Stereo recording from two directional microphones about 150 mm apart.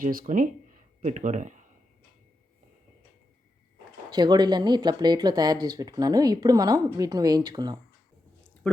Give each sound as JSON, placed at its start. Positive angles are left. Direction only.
{"t": 0.0, "sound": "speech", "side_deg": -65}
{"t": 4.1, "sound": "speech", "side_deg": -30}
{"t": 8.7, "sound": "speech", "side_deg": 5}